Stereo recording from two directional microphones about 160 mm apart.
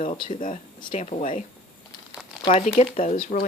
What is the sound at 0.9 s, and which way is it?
Speech, 55° left (ahead or behind).